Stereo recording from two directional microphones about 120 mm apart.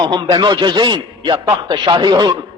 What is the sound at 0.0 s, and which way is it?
A man's voice, 40° right (ahead or behind).